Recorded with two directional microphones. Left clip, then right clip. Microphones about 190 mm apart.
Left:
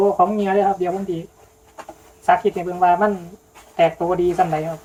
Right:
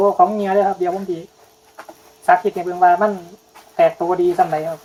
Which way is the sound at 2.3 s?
25° right (ahead or behind).